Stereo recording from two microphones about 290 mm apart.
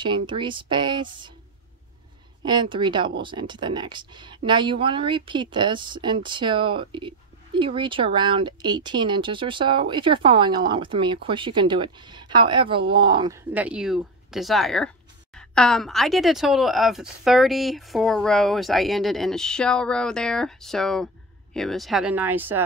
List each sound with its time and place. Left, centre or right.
0.0 s speech: centre
2.4 s speech: centre